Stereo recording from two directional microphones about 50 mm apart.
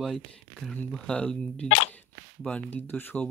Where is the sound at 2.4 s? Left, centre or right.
Left.